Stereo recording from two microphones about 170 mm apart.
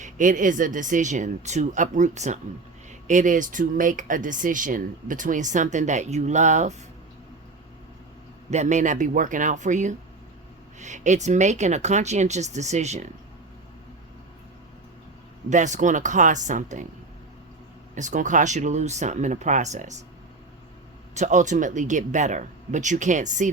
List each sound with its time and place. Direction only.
0.0 s speech: 50° right (ahead or behind)
8.4 s speech: 45° right (ahead or behind)
15.4 s speech: 45° right (ahead or behind)
17.9 s speech: 45° right (ahead or behind)
21.2 s speech: 45° right (ahead or behind)